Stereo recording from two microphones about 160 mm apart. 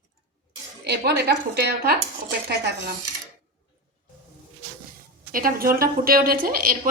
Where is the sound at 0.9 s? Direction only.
90° right.